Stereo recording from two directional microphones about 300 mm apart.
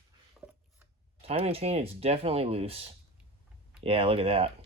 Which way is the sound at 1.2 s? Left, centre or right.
Centre.